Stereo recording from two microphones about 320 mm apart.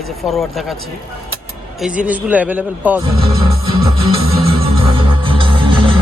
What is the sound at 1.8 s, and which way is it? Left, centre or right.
Speech, centre.